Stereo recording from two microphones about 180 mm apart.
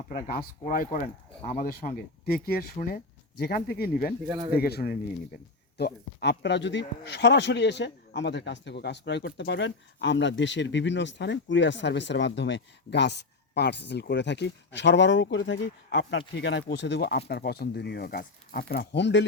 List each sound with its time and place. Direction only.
0.1 s speech: 55° left (ahead or behind)
4.3 s speech: 20° right (ahead or behind)
4.5 s speech: 60° left (ahead or behind); by 19.2 s 75° left (ahead or behind)